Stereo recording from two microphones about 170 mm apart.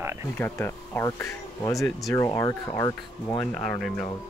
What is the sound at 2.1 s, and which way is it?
Speech, 20° left (ahead or behind).